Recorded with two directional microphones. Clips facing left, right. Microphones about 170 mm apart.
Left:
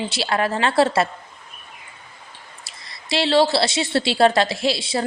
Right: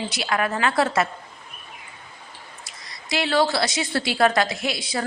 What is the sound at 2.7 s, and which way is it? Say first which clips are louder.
A woman's voice: left 3 dB; 30° left (ahead or behind).